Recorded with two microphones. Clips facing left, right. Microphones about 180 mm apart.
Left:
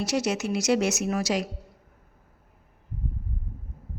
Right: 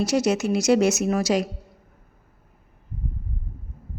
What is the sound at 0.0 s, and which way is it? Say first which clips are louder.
A woman's voice: right 5 dB; 45° right (ahead or behind).